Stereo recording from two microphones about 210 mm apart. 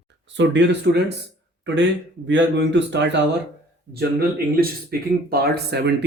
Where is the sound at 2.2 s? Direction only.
60° right (ahead or behind).